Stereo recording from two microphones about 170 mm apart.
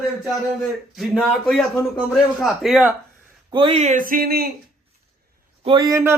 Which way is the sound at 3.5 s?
30° right (ahead or behind).